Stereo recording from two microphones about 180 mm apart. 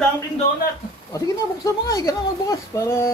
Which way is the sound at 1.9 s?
20° left (ahead or behind).